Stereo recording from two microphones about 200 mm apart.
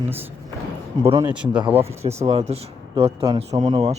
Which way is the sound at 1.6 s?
10° right (ahead or behind).